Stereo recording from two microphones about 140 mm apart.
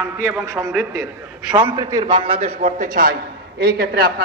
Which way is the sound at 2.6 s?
70° right (ahead or behind).